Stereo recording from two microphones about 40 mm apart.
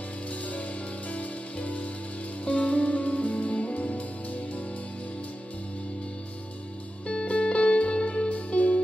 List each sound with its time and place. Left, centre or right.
1.1 s music: left
7.2 s music: left